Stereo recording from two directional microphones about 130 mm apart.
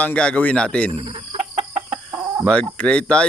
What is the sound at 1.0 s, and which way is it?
Chicken, 40° right (ahead or behind).